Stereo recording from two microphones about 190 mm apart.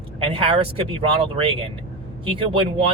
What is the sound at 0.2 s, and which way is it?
Speech, 30° right (ahead or behind).